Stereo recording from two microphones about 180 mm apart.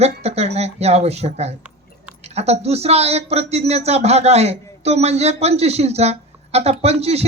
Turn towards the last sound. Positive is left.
turn(degrees=-35)  # may be behind; listen again after turning